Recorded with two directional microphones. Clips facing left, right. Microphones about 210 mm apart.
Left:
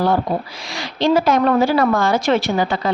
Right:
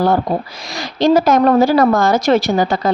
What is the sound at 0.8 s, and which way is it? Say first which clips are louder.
A woman's voice: right 4 dB; 40° right (ahead or behind).